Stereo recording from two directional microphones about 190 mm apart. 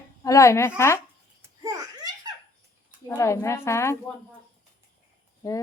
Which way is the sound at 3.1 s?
15° left (ahead or behind).